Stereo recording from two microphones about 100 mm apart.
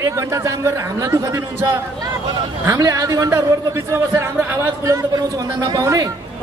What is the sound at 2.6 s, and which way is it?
A man's voice, 30° right (ahead or behind).